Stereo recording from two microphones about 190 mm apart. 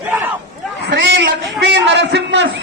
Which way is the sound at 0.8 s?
70° right (ahead or behind).